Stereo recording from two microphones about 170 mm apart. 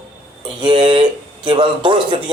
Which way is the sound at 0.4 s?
30° right (ahead or behind).